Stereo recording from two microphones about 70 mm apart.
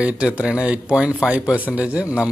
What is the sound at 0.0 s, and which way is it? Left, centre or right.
A man's voice, centre.